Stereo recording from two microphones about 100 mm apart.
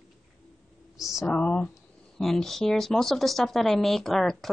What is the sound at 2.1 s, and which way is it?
Speech, 5° left (ahead or behind).